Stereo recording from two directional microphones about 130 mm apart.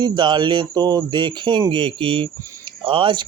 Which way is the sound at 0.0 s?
35° right (ahead or behind).